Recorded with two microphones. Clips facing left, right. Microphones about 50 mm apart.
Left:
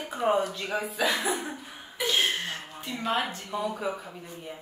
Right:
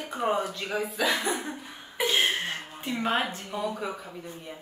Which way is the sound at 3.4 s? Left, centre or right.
Centre.